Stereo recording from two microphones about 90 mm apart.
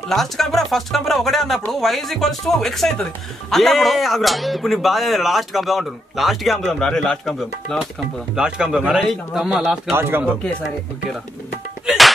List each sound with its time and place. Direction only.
0.1 s speech: 5° left (ahead or behind)
8.4 s speech: 10° right (ahead or behind)
9.9 s speech: 25° right (ahead or behind)
11.8 s music: centre (ahead or behind)